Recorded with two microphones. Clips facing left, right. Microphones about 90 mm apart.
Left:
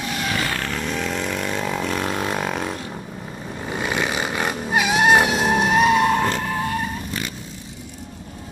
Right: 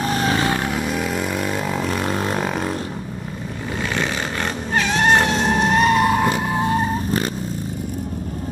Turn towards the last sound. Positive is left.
turn(degrees=-25)  # may be behind; listen again after turning